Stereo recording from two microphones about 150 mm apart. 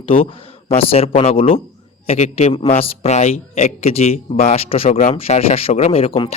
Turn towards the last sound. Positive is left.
turn(degrees=40)  # may be behind; listen again after turning